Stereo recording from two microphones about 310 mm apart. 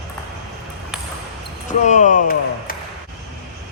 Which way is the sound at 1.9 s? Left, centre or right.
Left.